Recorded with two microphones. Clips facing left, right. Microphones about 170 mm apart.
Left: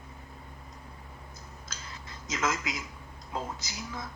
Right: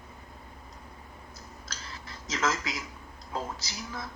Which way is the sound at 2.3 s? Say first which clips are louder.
Right 1 dB; 30° right (ahead or behind).